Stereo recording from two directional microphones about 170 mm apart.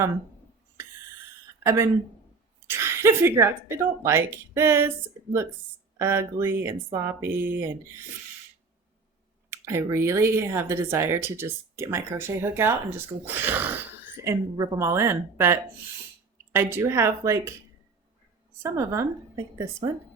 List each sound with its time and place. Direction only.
1.6 s speech: 15° right (ahead or behind)
6.0 s speech: 15° right (ahead or behind)
9.5 s speech: 15° right (ahead or behind)
14.3 s speech: 20° right (ahead or behind)
18.6 s speech: 15° right (ahead or behind)